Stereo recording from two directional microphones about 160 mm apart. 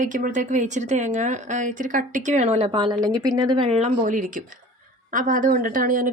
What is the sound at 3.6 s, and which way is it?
Speech, 45° right (ahead or behind).